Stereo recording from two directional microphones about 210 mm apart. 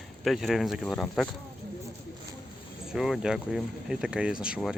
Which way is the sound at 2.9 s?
Centre (ahead or behind).